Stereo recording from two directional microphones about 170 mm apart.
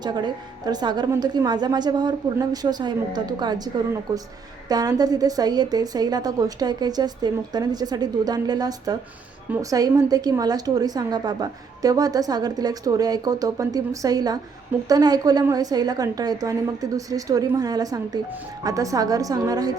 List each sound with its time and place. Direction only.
0.0 s a woman's voice: 25° right (ahead or behind)